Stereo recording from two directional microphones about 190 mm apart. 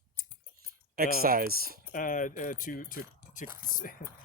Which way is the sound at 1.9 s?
45° left (ahead or behind).